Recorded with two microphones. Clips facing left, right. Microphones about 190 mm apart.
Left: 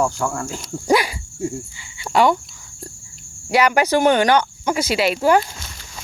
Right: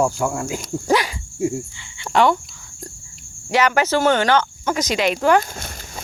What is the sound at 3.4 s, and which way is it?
Speech, 10° left (ahead or behind).